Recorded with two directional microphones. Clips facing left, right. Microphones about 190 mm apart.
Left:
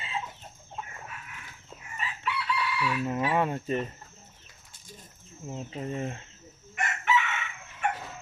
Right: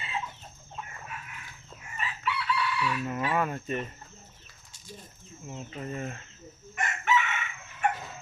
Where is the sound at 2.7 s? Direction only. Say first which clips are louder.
Left 1 dB; 10° left (ahead or behind).